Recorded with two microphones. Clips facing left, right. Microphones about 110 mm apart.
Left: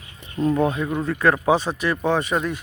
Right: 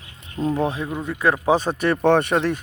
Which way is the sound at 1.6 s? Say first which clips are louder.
Right 4 dB; 50° right (ahead or behind).